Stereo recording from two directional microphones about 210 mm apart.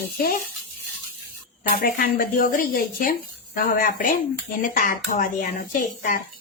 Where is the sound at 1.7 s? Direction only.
40° left (ahead or behind).